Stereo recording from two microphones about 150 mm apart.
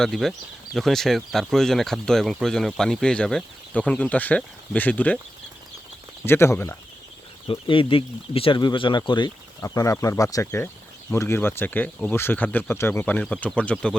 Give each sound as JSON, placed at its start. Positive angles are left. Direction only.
{"t": 0.0, "sound": "speech", "side_deg": 0}
{"t": 6.2, "sound": "speech", "side_deg": 15}
{"t": 7.4, "sound": "speech", "side_deg": 35}